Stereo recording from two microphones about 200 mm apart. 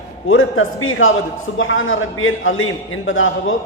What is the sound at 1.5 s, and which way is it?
A man's voice, 75° left (ahead or behind).